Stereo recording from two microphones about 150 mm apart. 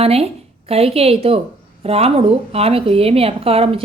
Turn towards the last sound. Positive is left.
turn(degrees=-40)  # may be behind; listen again after turning